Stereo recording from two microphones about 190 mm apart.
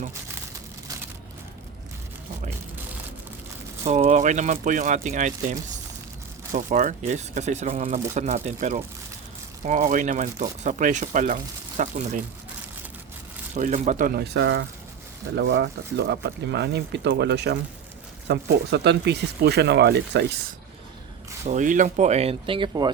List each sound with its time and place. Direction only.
3.8 s speech: 35° right (ahead or behind)
13.5 s speech: 40° right (ahead or behind); by 20.4 s 60° right (ahead or behind)
21.4 s speech: 40° right (ahead or behind); by 22.9 s 25° right (ahead or behind)